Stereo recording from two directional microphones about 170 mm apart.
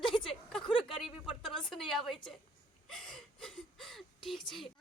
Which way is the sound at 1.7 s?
Centre (ahead or behind).